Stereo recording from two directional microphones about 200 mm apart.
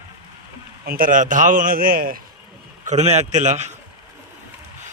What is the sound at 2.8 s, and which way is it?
Speech, 35° right (ahead or behind).